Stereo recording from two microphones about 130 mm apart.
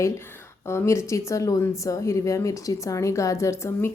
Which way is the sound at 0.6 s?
20° left (ahead or behind).